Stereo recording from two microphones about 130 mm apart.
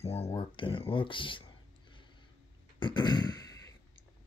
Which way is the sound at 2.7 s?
35° left (ahead or behind).